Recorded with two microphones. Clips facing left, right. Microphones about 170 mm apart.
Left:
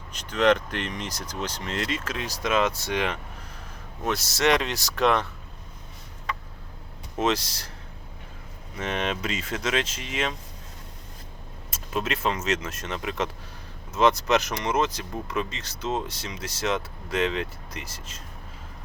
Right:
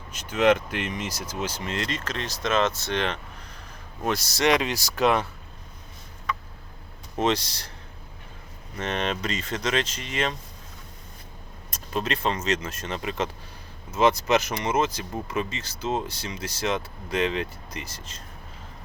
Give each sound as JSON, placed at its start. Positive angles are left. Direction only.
{"t": 0.1, "sound": "speech", "side_deg": -5}
{"t": 7.2, "sound": "speech", "side_deg": 0}
{"t": 8.7, "sound": "speech", "side_deg": 5}
{"t": 11.7, "sound": "speech", "side_deg": 5}